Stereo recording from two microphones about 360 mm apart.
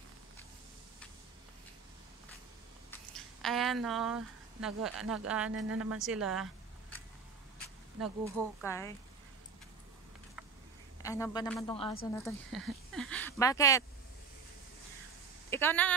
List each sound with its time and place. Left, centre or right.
2.9 s a sound: centre
5.7 s speech: right
5.9 s speech: centre
8.5 s speech: centre
11.0 s speech: centre
15.5 s speech: centre